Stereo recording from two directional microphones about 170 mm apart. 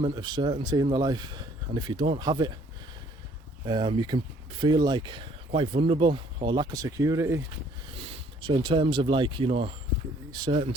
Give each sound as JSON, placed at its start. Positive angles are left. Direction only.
{"t": 0.0, "sound": "speech", "side_deg": -25}
{"t": 3.7, "sound": "speech", "side_deg": -25}
{"t": 7.9, "sound": "speech", "side_deg": -35}